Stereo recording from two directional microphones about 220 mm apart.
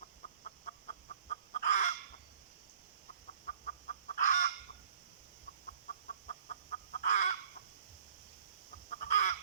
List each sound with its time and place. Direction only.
0.4 s fowl: 35° left (ahead or behind)
3.4 s chicken: 35° left (ahead or behind)
5.9 s chicken: 35° left (ahead or behind)
8.9 s chicken: 35° left (ahead or behind)